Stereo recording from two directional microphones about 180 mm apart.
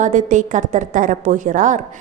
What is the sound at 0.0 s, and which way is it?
A woman's voice, 45° right (ahead or behind).